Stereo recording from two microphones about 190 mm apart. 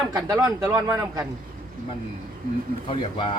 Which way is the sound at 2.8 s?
25° left (ahead or behind).